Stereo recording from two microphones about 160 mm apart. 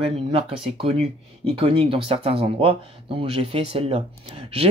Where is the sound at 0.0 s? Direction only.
35° right (ahead or behind).